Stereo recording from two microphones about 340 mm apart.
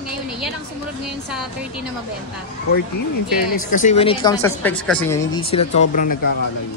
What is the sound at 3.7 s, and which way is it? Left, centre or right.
Speech, left.